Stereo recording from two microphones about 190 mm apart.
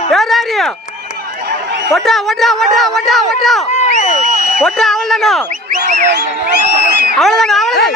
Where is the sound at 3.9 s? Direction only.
35° left (ahead or behind).